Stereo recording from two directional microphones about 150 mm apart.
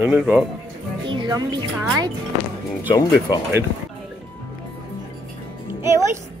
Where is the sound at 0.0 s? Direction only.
10° right (ahead or behind).